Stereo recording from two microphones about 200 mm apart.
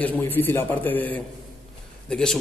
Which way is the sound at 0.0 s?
10° left (ahead or behind).